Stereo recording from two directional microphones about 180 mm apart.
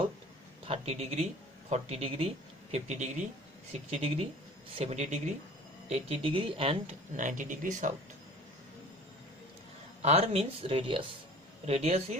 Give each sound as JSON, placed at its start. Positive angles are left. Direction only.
{"t": 0.7, "sound": "speech", "side_deg": -35}
{"t": 7.2, "sound": "speech", "side_deg": -45}
{"t": 10.0, "sound": "speech", "side_deg": -35}